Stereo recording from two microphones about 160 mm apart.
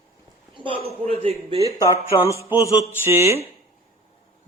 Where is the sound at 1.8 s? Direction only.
20° left (ahead or behind).